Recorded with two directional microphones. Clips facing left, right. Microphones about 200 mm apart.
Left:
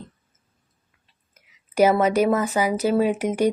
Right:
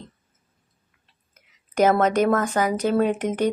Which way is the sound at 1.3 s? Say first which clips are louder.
Even; 10° left (ahead or behind).